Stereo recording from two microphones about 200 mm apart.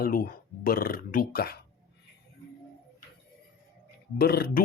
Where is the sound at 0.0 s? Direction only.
45° left (ahead or behind).